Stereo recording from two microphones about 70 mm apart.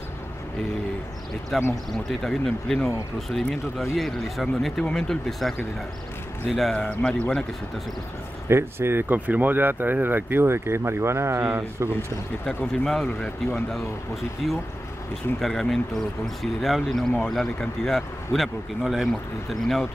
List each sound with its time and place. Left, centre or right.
1.5 s speech: centre
6.5 s speech: centre
6.9 s speech: centre
8.5 s speech: right
12.8 s speech: centre